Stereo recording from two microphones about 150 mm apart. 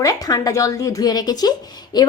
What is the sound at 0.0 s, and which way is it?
A woman's voice, 25° left (ahead or behind).